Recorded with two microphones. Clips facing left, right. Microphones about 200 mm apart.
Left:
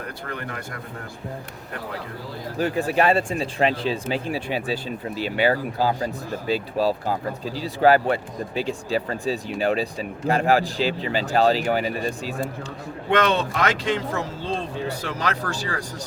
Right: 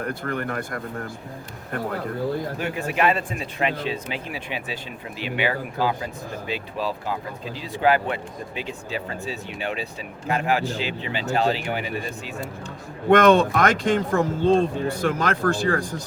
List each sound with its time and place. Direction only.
0.1 s speech: 50° right (ahead or behind)
2.6 s speech: 35° left (ahead or behind)
13.1 s speech: 50° right (ahead or behind)